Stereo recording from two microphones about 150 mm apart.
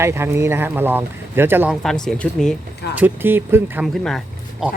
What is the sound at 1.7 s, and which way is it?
Speech, centre (ahead or behind).